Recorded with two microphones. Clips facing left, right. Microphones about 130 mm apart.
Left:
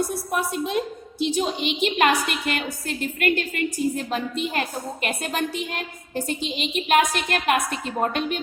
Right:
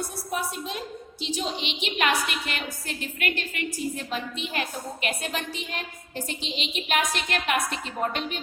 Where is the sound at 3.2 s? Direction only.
45° left (ahead or behind).